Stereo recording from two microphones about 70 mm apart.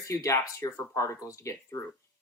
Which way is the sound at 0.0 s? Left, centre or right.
Left.